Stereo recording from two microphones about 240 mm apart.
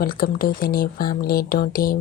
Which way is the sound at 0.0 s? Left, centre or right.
Left.